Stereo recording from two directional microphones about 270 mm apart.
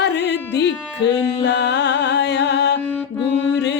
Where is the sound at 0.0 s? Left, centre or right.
Left.